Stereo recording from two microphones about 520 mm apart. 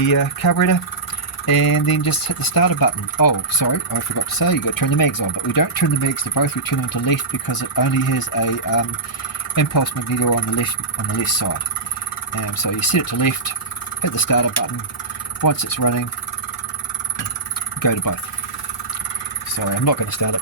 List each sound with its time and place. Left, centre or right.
0.0 s speech: left
12.6 s speech: left
17.8 s speech: left
19.5 s speech: left